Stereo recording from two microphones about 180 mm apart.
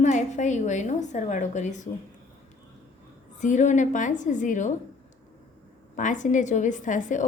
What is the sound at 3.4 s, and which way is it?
A woman's voice, 45° left (ahead or behind).